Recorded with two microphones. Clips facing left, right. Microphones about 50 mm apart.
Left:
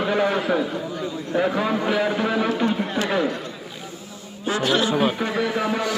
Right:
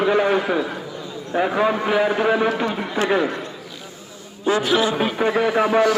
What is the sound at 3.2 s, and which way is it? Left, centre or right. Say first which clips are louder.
Speech: right 1 dB; right.